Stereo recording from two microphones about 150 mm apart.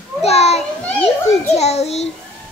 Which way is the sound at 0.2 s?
45° left (ahead or behind).